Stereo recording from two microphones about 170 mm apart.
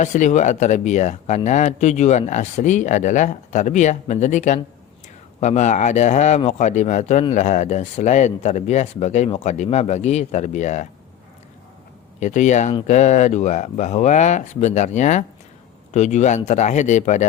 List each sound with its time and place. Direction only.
0.0 s a man's voice: 45° left (ahead or behind)
12.2 s a man's voice: 45° left (ahead or behind)